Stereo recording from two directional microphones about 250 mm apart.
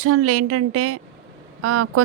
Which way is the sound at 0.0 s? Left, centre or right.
Right.